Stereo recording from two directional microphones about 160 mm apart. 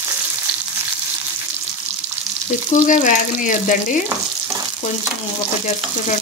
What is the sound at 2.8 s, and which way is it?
Speech, 55° left (ahead or behind).